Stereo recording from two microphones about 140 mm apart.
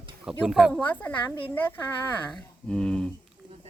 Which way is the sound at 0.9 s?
10° left (ahead or behind).